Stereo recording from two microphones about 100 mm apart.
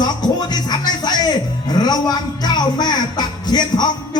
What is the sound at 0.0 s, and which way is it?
Speech, 45° left (ahead or behind).